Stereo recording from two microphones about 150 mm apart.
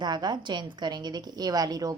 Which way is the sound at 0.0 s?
30° right (ahead or behind).